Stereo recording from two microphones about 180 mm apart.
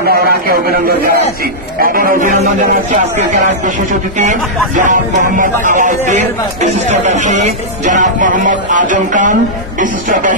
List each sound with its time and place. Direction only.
0.0 s a man's voice: 60° right (ahead or behind)
4.7 s speech: 50° right (ahead or behind)